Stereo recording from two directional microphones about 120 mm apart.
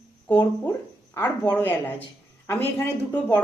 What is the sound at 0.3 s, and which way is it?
A man's voice, 15° left (ahead or behind).